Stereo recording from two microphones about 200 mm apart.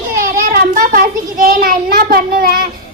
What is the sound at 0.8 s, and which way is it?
A child's voice, 45° right (ahead or behind).